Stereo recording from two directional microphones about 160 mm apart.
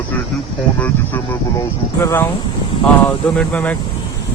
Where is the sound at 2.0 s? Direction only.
15° left (ahead or behind).